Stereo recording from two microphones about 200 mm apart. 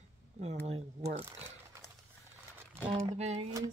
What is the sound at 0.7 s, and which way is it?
Speech, 35° right (ahead or behind).